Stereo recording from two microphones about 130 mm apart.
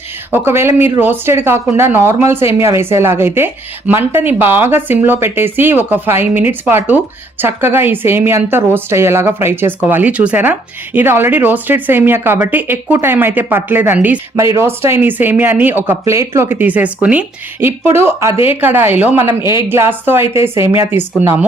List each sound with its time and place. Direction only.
0.3 s a woman's voice: 15° right (ahead or behind)